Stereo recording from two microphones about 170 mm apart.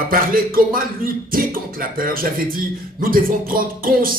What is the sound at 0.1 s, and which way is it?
Speech, 55° right (ahead or behind).